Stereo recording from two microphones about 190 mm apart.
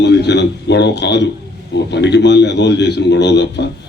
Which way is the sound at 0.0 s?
65° left (ahead or behind).